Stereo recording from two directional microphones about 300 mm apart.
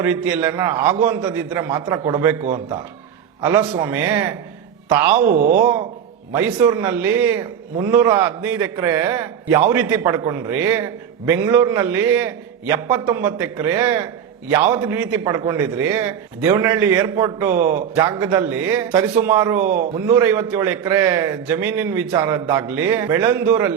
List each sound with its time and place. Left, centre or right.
0.0 s a man's voice: centre
5.1 s speech: right
6.3 s a man's voice: centre
19.6 s speech: right
20.1 s a man's voice: centre